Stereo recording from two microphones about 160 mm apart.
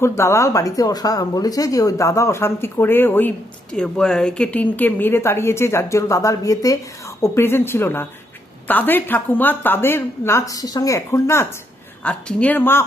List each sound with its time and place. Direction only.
0.0 s speech: 15° left (ahead or behind)